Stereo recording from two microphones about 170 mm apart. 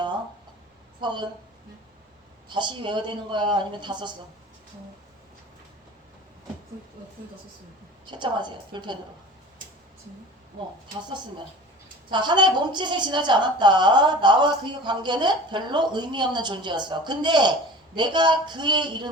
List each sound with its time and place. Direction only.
1.0 s a woman's voice: 25° right (ahead or behind)
2.5 s a woman's voice: 25° right (ahead or behind)
8.0 s a woman's voice: 25° right (ahead or behind)
12.1 s a woman's voice: 25° right (ahead or behind)